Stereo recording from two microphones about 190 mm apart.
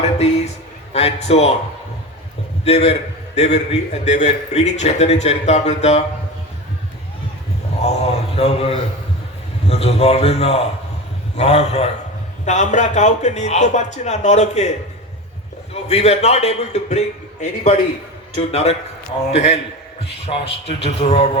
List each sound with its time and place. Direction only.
0.9 s a man's voice: 35° left (ahead or behind)
2.6 s a man's voice: 35° left (ahead or behind)
7.8 s a sound: 35° left (ahead or behind)
9.6 s a man's voice: 35° left (ahead or behind)
15.7 s a man's voice: 35° left (ahead or behind)